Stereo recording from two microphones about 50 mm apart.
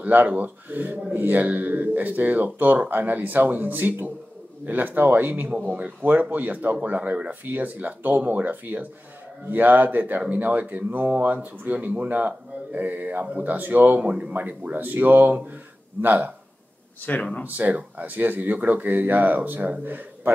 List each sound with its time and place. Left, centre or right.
0.0 s speech: right
5.7 s speech: right
14.0 s speech: right
14.3 s speech: right
17.0 s speech: left
17.6 s speech: right